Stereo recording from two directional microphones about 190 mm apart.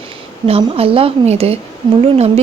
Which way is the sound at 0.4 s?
30° right (ahead or behind).